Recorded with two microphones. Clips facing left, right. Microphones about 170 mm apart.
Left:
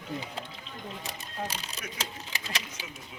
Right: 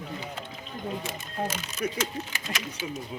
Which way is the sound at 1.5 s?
35° left (ahead or behind).